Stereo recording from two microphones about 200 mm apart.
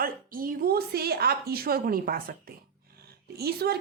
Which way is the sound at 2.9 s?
50° right (ahead or behind).